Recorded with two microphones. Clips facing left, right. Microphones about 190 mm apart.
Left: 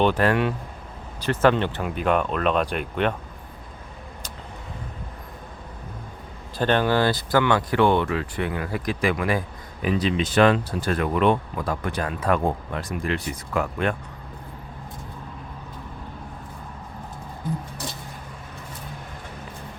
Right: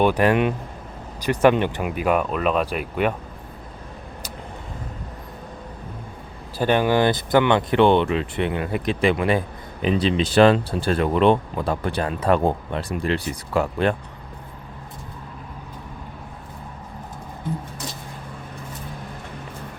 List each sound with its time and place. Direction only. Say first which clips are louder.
0.0 s speech: right 2 dB; 15° right (ahead or behind)
6.6 s speech: right 2 dB; 10° right (ahead or behind); by 13.9 s 30° right (ahead or behind)